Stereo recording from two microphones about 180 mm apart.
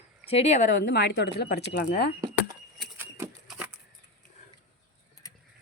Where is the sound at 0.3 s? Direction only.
35° left (ahead or behind).